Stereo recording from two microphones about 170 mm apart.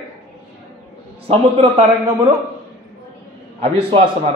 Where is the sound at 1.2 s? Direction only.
35° right (ahead or behind).